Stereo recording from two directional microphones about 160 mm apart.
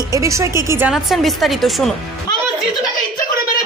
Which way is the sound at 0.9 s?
Centre (ahead or behind).